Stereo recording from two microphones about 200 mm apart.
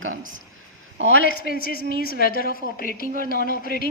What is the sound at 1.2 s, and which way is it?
A woman's voice, 45° left (ahead or behind).